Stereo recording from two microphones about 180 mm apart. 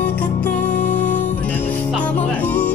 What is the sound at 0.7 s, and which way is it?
Music, 45° left (ahead or behind).